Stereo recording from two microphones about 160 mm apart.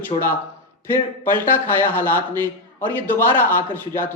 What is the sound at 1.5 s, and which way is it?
Speech, 15° left (ahead or behind).